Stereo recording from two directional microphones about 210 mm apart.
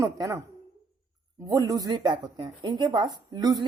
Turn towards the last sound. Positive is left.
turn(degrees=-20)  # may be behind; listen again after turning